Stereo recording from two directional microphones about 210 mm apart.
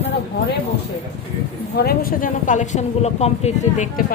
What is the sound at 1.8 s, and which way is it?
A woman's voice, 45° left (ahead or behind).